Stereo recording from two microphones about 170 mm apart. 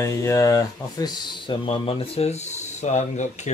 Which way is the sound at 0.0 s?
20° left (ahead or behind).